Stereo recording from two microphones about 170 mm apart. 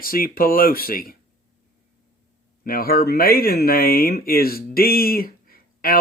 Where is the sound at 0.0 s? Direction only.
60° left (ahead or behind).